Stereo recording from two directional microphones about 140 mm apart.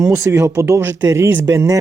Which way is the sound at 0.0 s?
20° right (ahead or behind).